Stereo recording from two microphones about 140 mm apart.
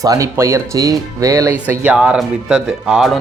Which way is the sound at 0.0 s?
25° right (ahead or behind).